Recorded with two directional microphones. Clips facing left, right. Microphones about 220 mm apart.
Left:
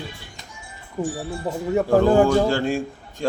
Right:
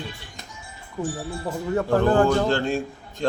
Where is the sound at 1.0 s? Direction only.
15° left (ahead or behind).